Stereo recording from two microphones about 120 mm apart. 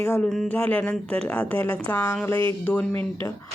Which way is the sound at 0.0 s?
20° left (ahead or behind).